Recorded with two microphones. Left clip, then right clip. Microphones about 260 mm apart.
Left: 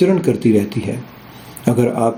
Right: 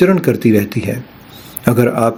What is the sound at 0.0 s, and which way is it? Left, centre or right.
Speech, right.